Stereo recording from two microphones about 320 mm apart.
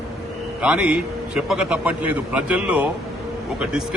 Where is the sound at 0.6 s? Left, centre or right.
Centre.